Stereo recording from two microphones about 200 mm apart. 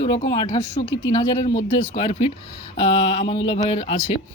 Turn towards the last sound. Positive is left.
turn(degrees=30)  # may be behind; listen again after turning